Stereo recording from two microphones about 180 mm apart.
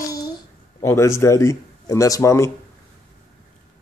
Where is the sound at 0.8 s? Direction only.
15° left (ahead or behind).